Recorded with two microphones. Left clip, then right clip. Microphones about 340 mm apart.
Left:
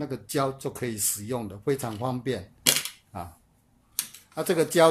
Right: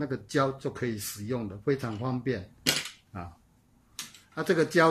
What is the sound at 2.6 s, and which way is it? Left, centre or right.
Camera, left.